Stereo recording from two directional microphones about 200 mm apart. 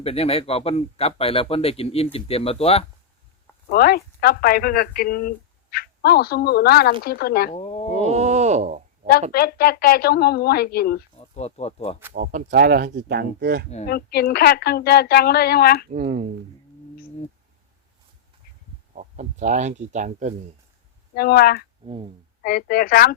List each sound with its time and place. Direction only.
0.0 s speech: 30° left (ahead or behind)
3.7 s speech: 50° left (ahead or behind)
7.5 s speech: 30° left (ahead or behind)
8.0 s speech: 35° right (ahead or behind)
9.3 s speech: 50° left (ahead or behind)
11.2 s speech: 30° left (ahead or behind)
12.1 s speech: 40° right (ahead or behind)
13.8 s speech: 50° left (ahead or behind)
15.9 s speech: 40° right (ahead or behind)
18.9 s speech: 35° right (ahead or behind)
21.2 s speech: 50° left (ahead or behind)
21.8 s speech: 25° right (ahead or behind)
22.4 s speech: 50° left (ahead or behind)